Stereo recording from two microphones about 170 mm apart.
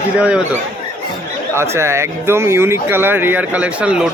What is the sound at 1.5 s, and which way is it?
Speech, 15° right (ahead or behind).